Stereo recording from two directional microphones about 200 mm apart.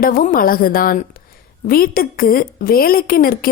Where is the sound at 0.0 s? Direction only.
45° left (ahead or behind).